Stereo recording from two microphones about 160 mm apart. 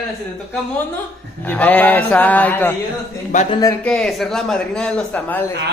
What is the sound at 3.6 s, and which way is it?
Speech, 20° left (ahead or behind).